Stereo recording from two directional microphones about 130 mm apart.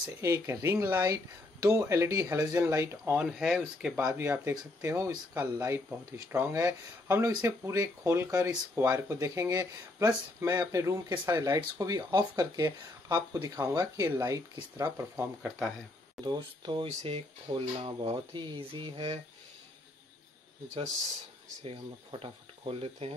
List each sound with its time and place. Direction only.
0.2 s speech: 20° right (ahead or behind)
3.2 s speech: 5° right (ahead or behind)
4.0 s speech: 20° right (ahead or behind)
16.3 s speech: 35° right (ahead or behind)
16.8 s speech: 50° right (ahead or behind)
22.2 s speech: 45° right (ahead or behind)